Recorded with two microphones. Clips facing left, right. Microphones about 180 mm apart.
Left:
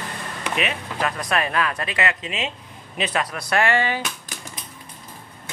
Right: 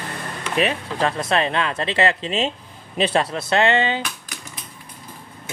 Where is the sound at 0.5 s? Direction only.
30° right (ahead or behind).